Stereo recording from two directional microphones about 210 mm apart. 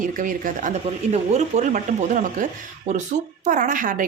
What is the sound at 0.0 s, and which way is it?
A woman's voice, 40° right (ahead or behind).